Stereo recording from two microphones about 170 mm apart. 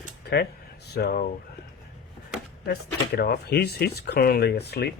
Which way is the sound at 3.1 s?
65° left (ahead or behind).